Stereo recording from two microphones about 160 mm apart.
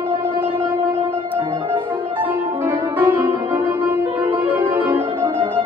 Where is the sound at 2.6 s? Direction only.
10° right (ahead or behind).